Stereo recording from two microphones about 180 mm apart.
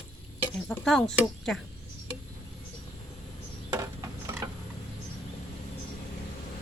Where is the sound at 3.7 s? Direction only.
15° right (ahead or behind).